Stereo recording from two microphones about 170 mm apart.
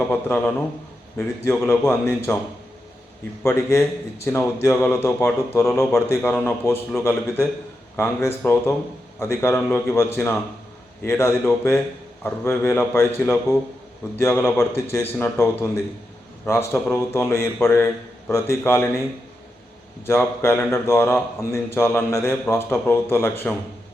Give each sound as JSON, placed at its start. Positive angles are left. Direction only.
{"t": 0.1, "sound": "a man's voice", "side_deg": 10}
{"t": 3.4, "sound": "a man's voice", "side_deg": 15}
{"t": 14.2, "sound": "a man's voice", "side_deg": 15}
{"t": 20.1, "sound": "a man's voice", "side_deg": 15}